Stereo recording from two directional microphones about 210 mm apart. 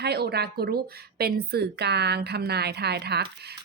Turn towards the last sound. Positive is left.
turn(degrees=-50)  # may be behind; listen again after turning